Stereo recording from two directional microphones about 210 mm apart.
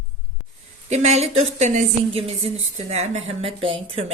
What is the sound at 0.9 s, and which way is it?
A woman's voice, 35° right (ahead or behind).